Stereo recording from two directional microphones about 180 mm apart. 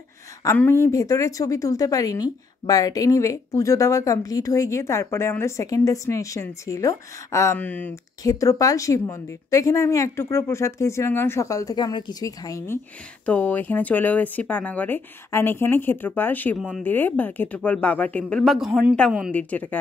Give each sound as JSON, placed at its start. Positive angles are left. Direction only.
{"t": 0.4, "sound": "a woman's voice", "side_deg": 15}
{"t": 8.2, "sound": "a woman's voice", "side_deg": 20}
{"t": 16.5, "sound": "speech", "side_deg": 0}
{"t": 16.8, "sound": "a woman's voice", "side_deg": 10}